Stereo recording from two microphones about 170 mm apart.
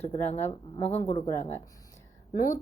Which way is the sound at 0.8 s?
35° left (ahead or behind).